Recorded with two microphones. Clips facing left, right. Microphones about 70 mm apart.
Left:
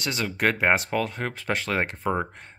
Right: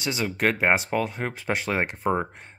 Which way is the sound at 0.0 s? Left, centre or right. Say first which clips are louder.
Even; centre.